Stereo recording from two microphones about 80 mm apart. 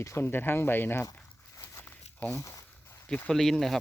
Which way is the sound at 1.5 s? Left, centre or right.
Left.